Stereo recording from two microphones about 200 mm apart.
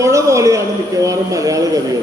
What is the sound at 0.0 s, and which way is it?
Speech, 15° right (ahead or behind).